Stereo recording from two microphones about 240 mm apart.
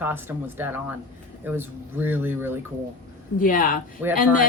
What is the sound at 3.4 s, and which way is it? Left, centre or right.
Speech, left.